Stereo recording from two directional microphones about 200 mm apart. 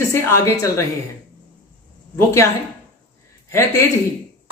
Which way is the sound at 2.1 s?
15° left (ahead or behind).